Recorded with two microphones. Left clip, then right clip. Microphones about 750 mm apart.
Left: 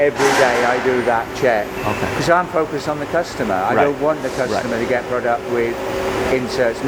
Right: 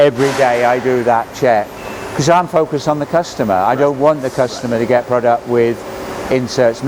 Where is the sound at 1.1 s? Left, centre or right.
Right.